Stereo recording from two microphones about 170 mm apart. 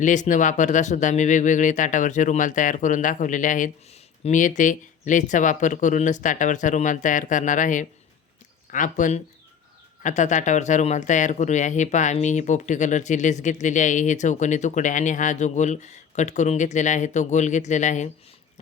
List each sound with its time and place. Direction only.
0.0 s speech: 45° left (ahead or behind)